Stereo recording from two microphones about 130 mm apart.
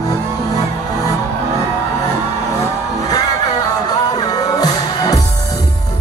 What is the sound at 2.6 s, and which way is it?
Music, 30° left (ahead or behind).